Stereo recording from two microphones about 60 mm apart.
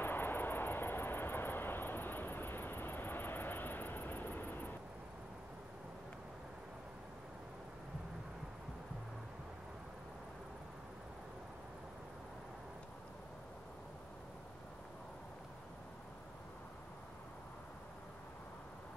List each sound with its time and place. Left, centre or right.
0.0 s vehicle: left